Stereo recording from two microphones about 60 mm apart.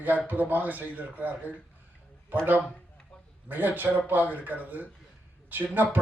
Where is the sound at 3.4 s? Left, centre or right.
Right.